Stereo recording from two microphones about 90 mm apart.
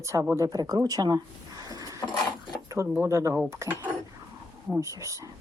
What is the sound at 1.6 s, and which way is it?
Drawer open or close, 45° right (ahead or behind).